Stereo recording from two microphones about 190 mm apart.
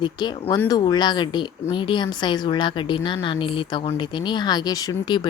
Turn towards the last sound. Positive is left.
turn(degrees=20)  # may be behind; listen again after turning